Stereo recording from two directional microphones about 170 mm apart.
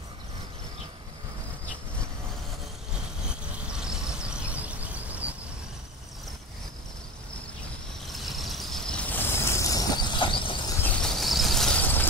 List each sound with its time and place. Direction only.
3.7 s vehicle: 5° right (ahead or behind)
8.1 s vehicle: centre (ahead or behind); by 10.6 s 30° left (ahead or behind)
10.8 s vehicle: centre (ahead or behind)